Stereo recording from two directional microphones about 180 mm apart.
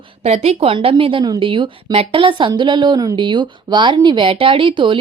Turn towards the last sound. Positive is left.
turn(degrees=-25)  # may be behind; listen again after turning